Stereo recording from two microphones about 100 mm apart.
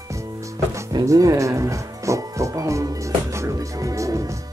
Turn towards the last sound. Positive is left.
turn(degrees=-35)  # may be behind; listen again after turning